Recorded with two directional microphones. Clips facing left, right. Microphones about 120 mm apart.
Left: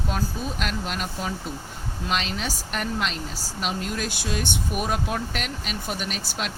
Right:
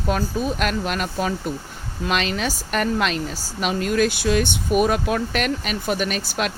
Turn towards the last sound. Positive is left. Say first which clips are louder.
# right 7 dB
turn(degrees=-65)  # may be behind; listen again after turning